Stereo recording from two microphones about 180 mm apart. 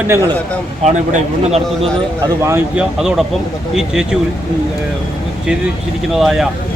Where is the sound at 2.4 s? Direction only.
15° right (ahead or behind).